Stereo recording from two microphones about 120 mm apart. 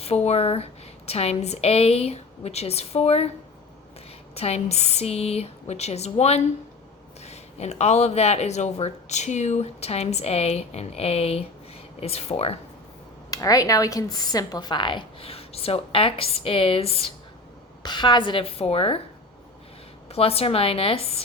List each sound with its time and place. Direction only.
0.0 s speech: 60° left (ahead or behind)
4.4 s speech: 60° left (ahead or behind)
13.3 s a woman's voice: 30° left (ahead or behind); by 17.1 s 55° left (ahead or behind)
17.8 s a woman's voice: 40° left (ahead or behind)
20.1 s speech: 55° left (ahead or behind)